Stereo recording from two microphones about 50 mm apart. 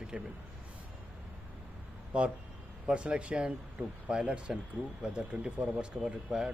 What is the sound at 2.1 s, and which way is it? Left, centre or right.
Speech, right.